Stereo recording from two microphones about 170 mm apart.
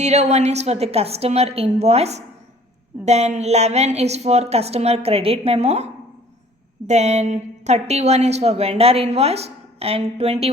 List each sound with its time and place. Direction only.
0.0 s a woman's voice: 40° right (ahead or behind)